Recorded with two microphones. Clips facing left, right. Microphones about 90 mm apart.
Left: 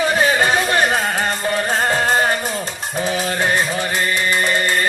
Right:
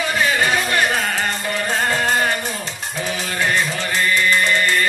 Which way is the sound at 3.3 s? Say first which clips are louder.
Right 2 dB; 35° left (ahead or behind).